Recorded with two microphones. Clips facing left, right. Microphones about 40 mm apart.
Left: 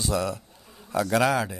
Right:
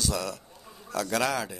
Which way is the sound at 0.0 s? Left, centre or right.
Left.